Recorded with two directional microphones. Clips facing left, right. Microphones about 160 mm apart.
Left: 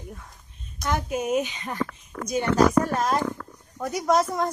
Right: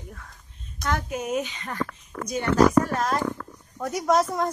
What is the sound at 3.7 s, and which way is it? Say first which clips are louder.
Speech: even; centre (ahead or behind).